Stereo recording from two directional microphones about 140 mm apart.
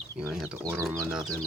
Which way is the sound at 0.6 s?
20° right (ahead or behind).